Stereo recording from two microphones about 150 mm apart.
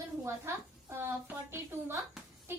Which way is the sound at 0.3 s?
20° right (ahead or behind).